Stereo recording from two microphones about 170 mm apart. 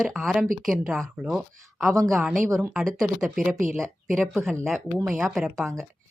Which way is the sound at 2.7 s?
Centre (ahead or behind).